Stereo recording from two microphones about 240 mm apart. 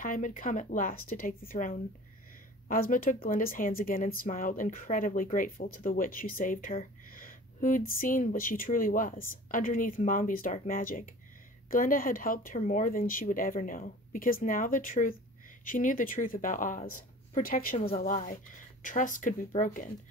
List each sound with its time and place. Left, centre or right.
0.0 s speech: left